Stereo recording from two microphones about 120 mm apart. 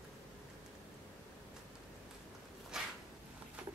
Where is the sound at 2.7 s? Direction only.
5° right (ahead or behind).